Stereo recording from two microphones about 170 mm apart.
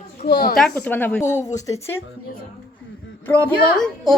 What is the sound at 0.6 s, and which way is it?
Speech, 10° left (ahead or behind).